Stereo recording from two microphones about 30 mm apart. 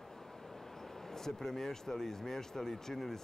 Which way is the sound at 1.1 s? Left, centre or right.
Centre.